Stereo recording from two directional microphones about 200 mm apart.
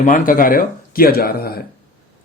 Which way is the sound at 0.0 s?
40° left (ahead or behind).